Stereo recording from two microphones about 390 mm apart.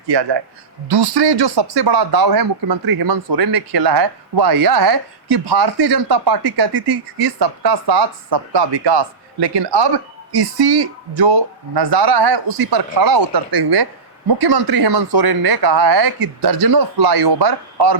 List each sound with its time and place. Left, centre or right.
0.1 s speech: right
14.3 s speech: right